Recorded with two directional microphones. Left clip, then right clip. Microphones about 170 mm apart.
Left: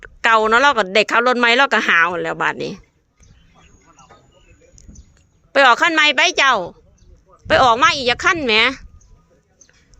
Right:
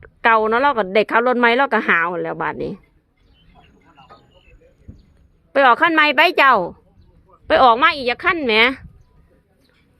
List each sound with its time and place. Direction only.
0.0 s speech: 15° right (ahead or behind)
5.5 s a woman's voice: 15° right (ahead or behind); by 6.8 s 30° right (ahead or behind)
7.4 s speech: 15° right (ahead or behind)